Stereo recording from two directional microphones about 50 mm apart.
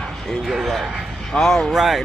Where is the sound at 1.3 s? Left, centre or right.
Centre.